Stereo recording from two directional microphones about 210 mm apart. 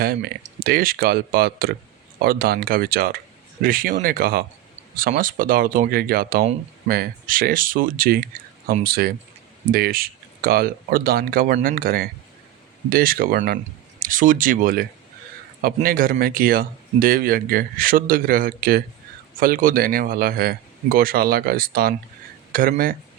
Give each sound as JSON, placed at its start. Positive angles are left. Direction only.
{"t": 0.0, "sound": "speech", "side_deg": -45}